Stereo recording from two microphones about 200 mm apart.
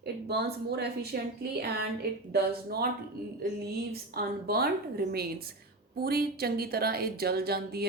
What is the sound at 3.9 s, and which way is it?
A woman's voice, 50° right (ahead or behind).